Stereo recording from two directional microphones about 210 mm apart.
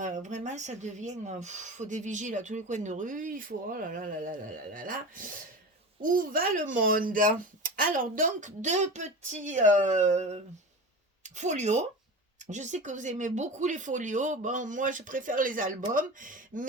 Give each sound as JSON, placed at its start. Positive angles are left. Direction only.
{"t": 0.0, "sound": "speech", "side_deg": -35}